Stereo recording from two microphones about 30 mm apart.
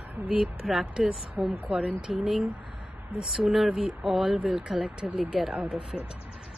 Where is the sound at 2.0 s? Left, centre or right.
Right.